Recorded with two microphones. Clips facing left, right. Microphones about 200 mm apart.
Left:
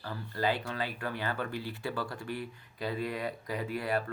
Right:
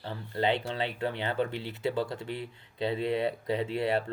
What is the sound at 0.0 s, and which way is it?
Speech, 25° right (ahead or behind).